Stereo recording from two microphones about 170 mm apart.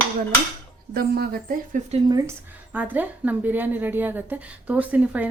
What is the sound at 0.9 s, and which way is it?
Speech, 60° right (ahead or behind).